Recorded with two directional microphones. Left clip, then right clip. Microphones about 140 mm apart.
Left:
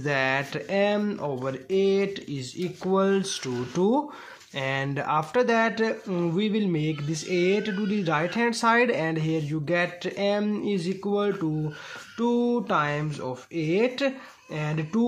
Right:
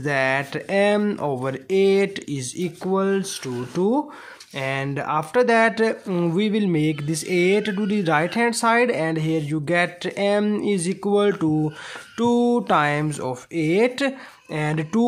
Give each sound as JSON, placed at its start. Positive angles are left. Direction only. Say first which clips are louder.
{"t": 0.0, "sound": "speech", "louder": "right 4 dB", "side_deg": -25}
{"t": 2.8, "sound": "speech", "louder": "right 1 dB", "side_deg": -20}